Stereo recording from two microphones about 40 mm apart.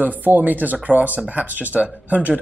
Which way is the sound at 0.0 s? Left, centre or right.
Right.